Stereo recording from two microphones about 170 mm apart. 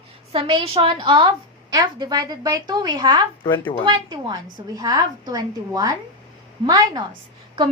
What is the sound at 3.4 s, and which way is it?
Speech, 30° left (ahead or behind).